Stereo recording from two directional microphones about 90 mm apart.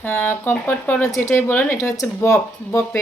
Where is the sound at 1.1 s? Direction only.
35° left (ahead or behind).